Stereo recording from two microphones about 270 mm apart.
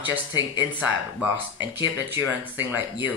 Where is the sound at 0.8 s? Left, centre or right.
Centre.